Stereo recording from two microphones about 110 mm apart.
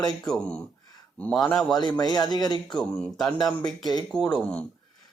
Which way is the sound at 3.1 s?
Centre (ahead or behind).